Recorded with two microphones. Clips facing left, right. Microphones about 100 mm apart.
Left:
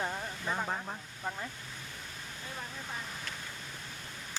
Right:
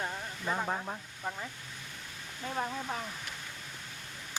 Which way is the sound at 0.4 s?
5° right (ahead or behind).